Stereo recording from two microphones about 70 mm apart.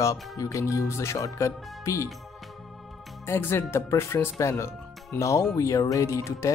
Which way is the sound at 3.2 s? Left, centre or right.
Left.